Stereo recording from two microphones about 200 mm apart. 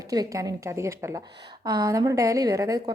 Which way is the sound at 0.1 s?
20° right (ahead or behind).